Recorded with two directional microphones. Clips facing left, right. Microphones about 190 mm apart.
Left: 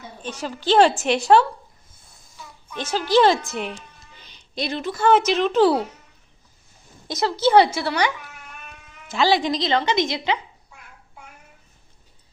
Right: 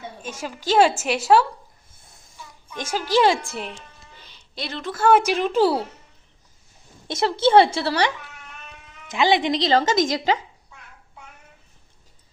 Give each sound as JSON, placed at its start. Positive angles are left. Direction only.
{"t": 0.2, "sound": "a woman's voice", "side_deg": -10}
{"t": 2.6, "sound": "a woman's voice", "side_deg": -10}
{"t": 4.2, "sound": "a sound", "side_deg": 15}
{"t": 4.8, "sound": "a woman's voice", "side_deg": -5}
{"t": 7.1, "sound": "a woman's voice", "side_deg": -25}
{"t": 9.0, "sound": "speech", "side_deg": -20}